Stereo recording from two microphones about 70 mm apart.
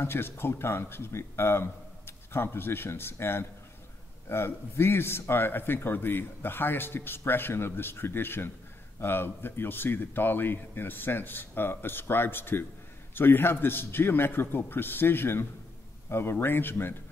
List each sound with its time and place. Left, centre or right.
0.0 s speech: left